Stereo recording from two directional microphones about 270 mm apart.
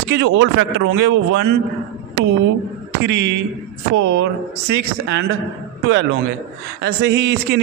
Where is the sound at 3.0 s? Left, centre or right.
Right.